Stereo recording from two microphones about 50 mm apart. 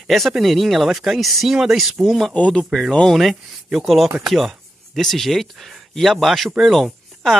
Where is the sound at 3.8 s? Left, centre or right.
Centre.